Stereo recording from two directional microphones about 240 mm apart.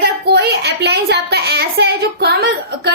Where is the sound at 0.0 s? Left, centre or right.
Right.